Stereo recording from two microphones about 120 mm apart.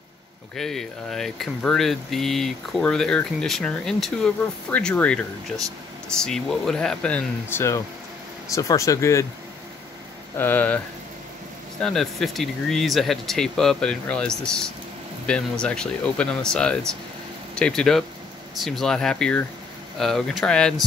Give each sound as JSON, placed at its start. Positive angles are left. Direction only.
{"t": 0.6, "sound": "speech", "side_deg": 5}
{"t": 10.3, "sound": "speech", "side_deg": 15}
{"t": 11.8, "sound": "speech", "side_deg": 5}